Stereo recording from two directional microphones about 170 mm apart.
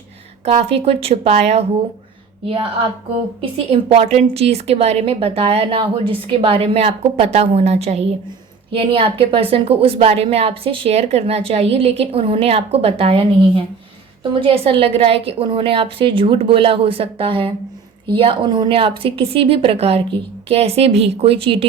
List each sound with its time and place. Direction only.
0.4 s a woman's voice: 35° right (ahead or behind)